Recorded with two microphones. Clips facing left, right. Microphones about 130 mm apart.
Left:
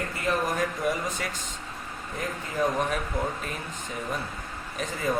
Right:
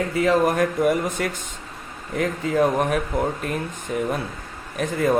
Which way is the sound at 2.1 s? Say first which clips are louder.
Right 9 dB; 75° right (ahead or behind).